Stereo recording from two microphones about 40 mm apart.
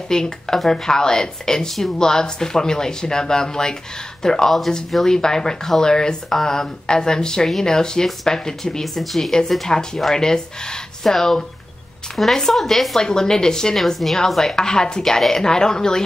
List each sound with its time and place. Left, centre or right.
0.1 s speech: centre
4.5 s speech: centre
5.0 s speech: centre
8.8 s speech: centre
9.7 s speech: centre
13.7 s speech: centre
14.4 s speech: centre